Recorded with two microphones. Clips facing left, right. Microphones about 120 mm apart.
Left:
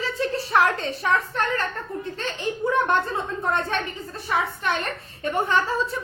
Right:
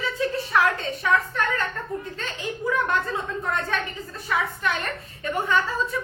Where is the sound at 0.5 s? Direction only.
30° left (ahead or behind).